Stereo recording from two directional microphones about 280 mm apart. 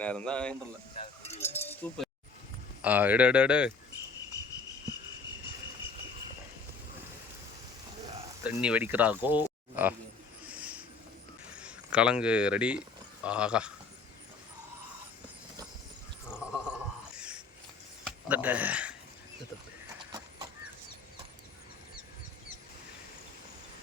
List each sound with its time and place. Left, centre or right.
0.0 s speech: centre
0.9 s cowbell: left
1.6 s keys jangling: centre
2.8 s speech: centre
8.4 s speech: centre
10.5 s a sound: centre
11.6 s speech: centre
16.3 s a sound: centre
20.0 s horse: centre